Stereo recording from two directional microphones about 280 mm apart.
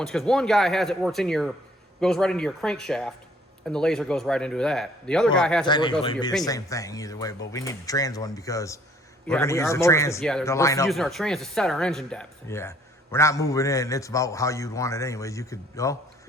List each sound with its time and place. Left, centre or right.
0.0 s a man's voice: centre
5.6 s speech: centre